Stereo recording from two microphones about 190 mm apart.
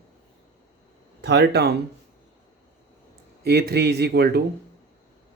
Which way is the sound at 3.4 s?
55° right (ahead or behind).